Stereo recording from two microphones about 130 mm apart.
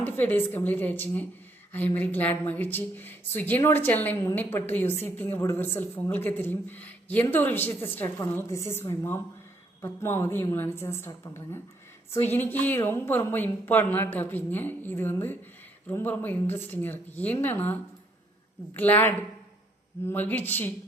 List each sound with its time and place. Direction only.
0.0 s a woman's voice: 15° left (ahead or behind)
18.8 s a woman's voice: 15° left (ahead or behind)